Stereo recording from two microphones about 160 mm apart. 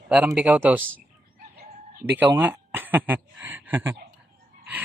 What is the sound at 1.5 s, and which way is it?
Chicken, 60° right (ahead or behind).